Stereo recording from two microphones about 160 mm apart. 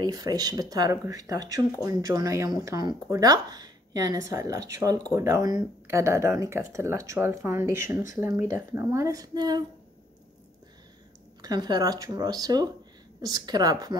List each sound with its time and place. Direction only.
0.0 s speech: 20° right (ahead or behind)
11.4 s speech: 25° right (ahead or behind)